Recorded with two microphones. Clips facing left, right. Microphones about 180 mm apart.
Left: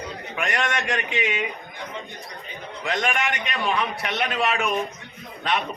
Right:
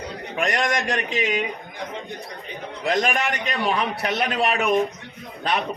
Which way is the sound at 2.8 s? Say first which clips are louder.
Right 3 dB; 35° right (ahead or behind).